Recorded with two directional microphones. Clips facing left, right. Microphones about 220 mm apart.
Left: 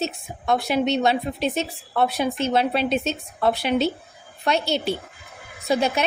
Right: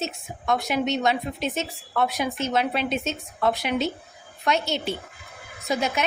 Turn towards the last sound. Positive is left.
turn(degrees=30)  # may be behind; listen again after turning